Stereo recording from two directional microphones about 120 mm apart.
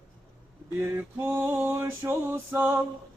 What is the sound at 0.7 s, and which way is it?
Male singing, 20° right (ahead or behind).